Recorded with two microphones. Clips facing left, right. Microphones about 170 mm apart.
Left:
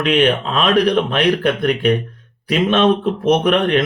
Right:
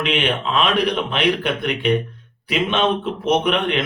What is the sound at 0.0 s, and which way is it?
Speech, 45° left (ahead or behind).